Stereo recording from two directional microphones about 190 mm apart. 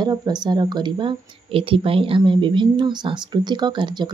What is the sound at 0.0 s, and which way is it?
Speech, 20° right (ahead or behind).